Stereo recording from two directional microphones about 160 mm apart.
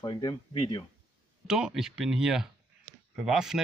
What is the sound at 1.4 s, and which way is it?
Speech, 5° right (ahead or behind).